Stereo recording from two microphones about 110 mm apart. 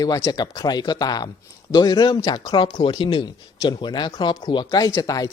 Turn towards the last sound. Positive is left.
turn(degrees=30)  # may be behind; listen again after turning